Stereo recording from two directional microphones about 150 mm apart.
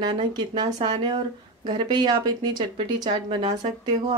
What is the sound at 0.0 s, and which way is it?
Speech, 30° right (ahead or behind).